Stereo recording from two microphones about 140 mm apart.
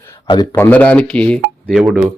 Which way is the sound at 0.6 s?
10° left (ahead or behind).